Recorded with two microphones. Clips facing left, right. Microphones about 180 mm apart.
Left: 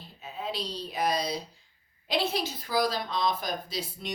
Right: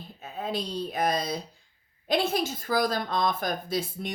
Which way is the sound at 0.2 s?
50° right (ahead or behind).